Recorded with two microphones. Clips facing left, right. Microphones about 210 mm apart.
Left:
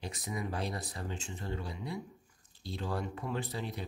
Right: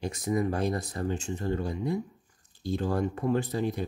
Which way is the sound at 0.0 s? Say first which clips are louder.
Right 10 dB; 45° right (ahead or behind).